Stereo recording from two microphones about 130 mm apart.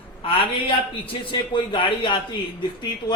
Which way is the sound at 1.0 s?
40° left (ahead or behind).